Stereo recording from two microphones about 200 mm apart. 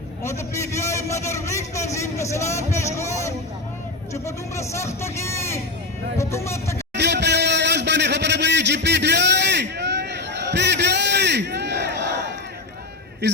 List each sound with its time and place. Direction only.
0.3 s a man's voice: 15° left (ahead or behind)
4.1 s a man's voice: 15° left (ahead or behind)
6.9 s a sound: 60° right (ahead or behind)
13.2 s speech: 55° right (ahead or behind)